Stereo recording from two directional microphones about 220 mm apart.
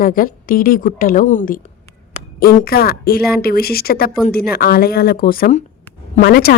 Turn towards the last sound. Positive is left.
turn(degrees=45)  # may be behind; listen again after turning